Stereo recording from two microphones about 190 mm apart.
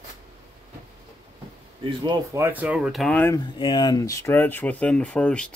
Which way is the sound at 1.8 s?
25° right (ahead or behind).